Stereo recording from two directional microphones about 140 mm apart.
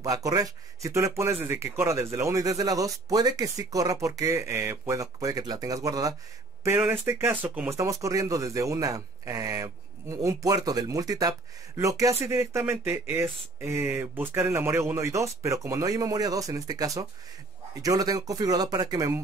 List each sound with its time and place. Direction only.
0.0 s speech: 25° right (ahead or behind)